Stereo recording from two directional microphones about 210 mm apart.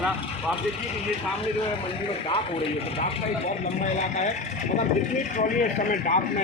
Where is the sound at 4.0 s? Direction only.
35° left (ahead or behind).